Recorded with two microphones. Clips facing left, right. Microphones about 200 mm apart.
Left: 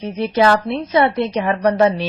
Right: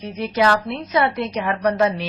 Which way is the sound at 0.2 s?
30° left (ahead or behind).